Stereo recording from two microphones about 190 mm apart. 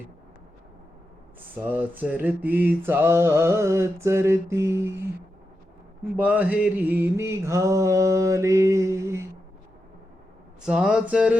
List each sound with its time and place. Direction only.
1.6 s mantra: 10° right (ahead or behind)
6.1 s mantra: 10° right (ahead or behind)
10.7 s a sound: 5° right (ahead or behind)